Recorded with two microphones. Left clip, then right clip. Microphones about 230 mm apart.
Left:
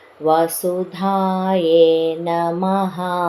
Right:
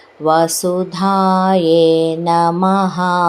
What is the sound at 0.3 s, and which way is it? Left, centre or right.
Mantra, right.